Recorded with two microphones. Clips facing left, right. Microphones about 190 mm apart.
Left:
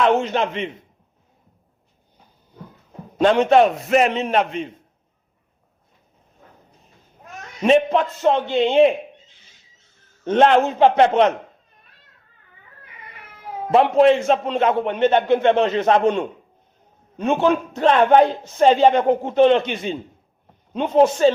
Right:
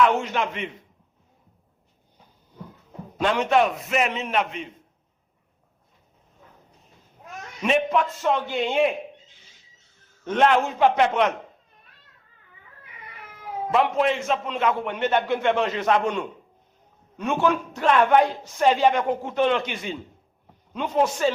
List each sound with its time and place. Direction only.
0.0 s speech: 30° left (ahead or behind)
3.2 s a man's voice: 30° left (ahead or behind)
7.6 s speech: 30° left (ahead or behind)
10.2 s speech: 30° left (ahead or behind)
13.7 s speech: 35° left (ahead or behind)
17.2 s speech: 30° left (ahead or behind)